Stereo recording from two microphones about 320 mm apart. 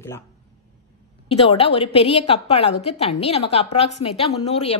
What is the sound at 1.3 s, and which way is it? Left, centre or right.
A woman's voice, centre.